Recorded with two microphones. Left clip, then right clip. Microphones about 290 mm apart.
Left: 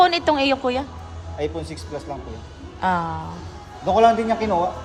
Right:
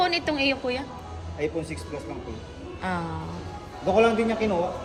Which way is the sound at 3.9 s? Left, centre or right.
Left.